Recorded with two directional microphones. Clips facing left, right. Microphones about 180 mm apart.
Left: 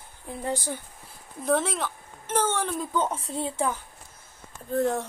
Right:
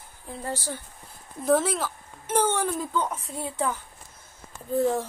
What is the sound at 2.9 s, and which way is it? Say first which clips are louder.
Speech: left 2 dB; 15° left (ahead or behind).